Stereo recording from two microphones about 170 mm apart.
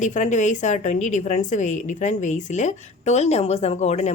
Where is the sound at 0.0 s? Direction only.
45° left (ahead or behind).